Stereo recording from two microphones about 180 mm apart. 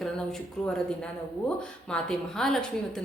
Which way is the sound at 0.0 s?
5° left (ahead or behind).